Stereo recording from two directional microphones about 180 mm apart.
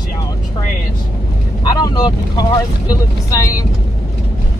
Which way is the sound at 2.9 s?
20° left (ahead or behind).